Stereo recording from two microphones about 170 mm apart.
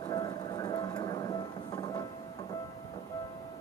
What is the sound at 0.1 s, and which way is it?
Music, 25° left (ahead or behind).